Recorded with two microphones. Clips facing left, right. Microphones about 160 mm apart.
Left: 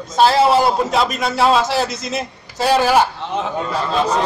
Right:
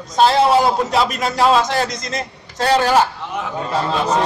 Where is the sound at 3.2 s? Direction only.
25° left (ahead or behind).